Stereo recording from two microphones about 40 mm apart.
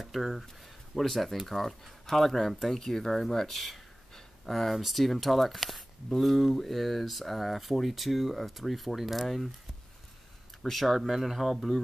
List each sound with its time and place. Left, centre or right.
0.0 s speech: centre
10.6 s speech: centre